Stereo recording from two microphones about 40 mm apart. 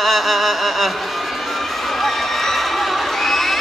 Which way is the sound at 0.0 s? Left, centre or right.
Centre.